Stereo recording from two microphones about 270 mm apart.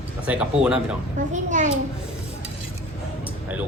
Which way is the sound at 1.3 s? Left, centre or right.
Right.